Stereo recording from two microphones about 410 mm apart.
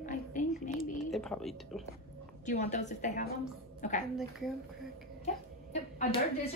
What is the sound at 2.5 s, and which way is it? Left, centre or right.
A woman's voice, centre.